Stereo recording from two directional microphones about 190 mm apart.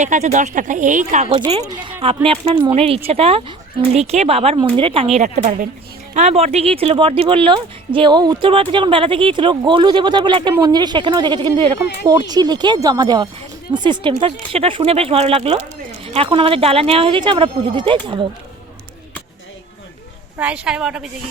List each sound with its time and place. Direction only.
0.0 s speech: 35° right (ahead or behind)
6.1 s speech: 35° right (ahead or behind)
20.4 s a woman's voice: 5° right (ahead or behind)